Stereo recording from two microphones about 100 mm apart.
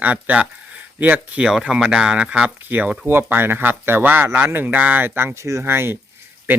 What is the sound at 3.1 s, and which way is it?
Speech, 20° right (ahead or behind).